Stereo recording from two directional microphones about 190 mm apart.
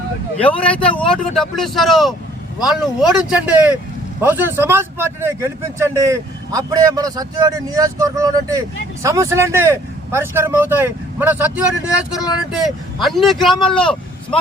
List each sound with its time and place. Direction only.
0.4 s speech: 5° left (ahead or behind)